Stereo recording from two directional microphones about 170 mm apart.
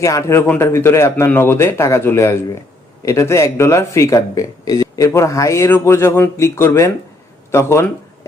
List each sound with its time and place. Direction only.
0.0 s speech: 20° left (ahead or behind)